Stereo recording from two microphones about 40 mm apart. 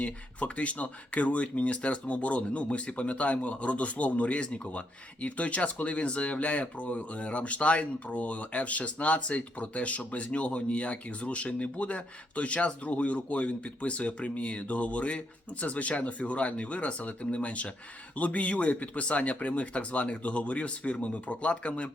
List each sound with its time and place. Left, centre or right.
0.0 s speech: left